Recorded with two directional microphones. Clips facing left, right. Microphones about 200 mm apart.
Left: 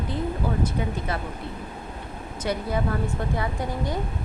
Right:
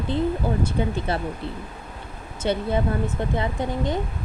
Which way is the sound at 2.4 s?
25° right (ahead or behind).